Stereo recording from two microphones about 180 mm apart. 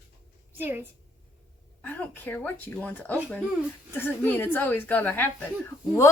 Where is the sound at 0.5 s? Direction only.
10° right (ahead or behind).